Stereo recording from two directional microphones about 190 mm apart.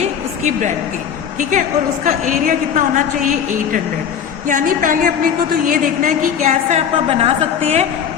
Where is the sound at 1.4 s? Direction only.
40° right (ahead or behind).